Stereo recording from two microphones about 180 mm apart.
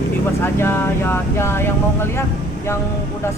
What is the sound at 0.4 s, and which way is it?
Speech, 15° left (ahead or behind).